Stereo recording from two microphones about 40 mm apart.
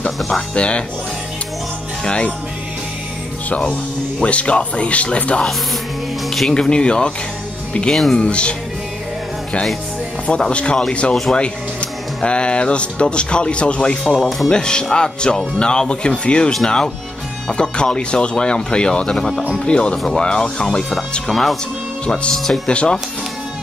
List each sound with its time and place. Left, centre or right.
0.6 s speech: left
2.0 s speech: left
3.4 s speech: left
6.7 s speech: left
7.9 s speech: centre
8.2 s speech: left
10.2 s speech: left
14.0 s speech: centre
14.5 s speech: centre
22.7 s speech: left